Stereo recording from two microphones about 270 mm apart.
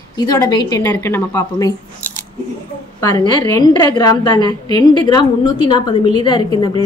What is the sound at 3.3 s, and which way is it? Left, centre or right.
A woman's voice, centre.